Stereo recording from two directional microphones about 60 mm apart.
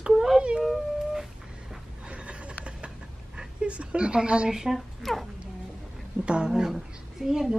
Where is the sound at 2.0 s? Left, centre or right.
Centre.